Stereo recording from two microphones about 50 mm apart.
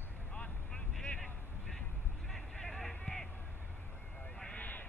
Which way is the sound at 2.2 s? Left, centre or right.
Centre.